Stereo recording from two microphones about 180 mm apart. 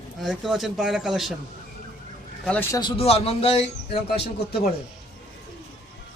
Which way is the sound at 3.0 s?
35° left (ahead or behind).